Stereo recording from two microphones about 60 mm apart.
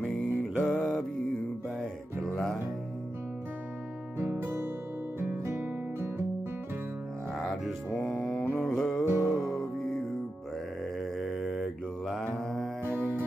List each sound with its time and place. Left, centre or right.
0.6 s mantra: left
2.3 s music: centre
4.2 s music: right
8.0 s mantra: centre
9.1 s music: left
9.4 s music: centre
11.0 s mantra: centre